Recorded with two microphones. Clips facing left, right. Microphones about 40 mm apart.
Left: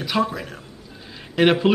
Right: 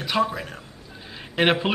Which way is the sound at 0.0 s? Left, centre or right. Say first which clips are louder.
Left 1 dB; centre.